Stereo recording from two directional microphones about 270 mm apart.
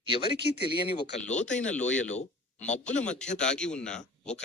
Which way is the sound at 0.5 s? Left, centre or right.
Left.